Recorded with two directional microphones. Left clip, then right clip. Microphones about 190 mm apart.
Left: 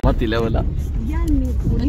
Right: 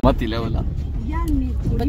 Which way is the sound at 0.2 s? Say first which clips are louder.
Left 6 dB; 5° left (ahead or behind).